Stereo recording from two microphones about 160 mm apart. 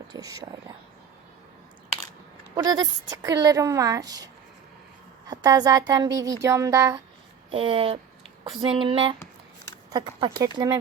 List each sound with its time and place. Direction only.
0.1 s a woman's voice: 20° right (ahead or behind)
2.6 s a woman's voice: 25° right (ahead or behind)
5.3 s a woman's voice: 25° right (ahead or behind)
7.5 s a sound: 35° right (ahead or behind)
9.9 s a woman's voice: 30° right (ahead or behind)